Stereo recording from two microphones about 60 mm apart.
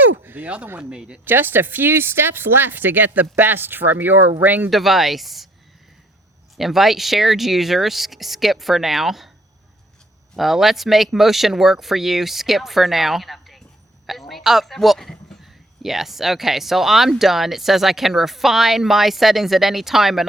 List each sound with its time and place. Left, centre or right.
0.0 s a sound: right
0.8 s speech: centre
1.2 s speech: right
4.7 s speech: centre
6.6 s speech: centre
10.3 s a woman's voice: centre
15.4 s speech: centre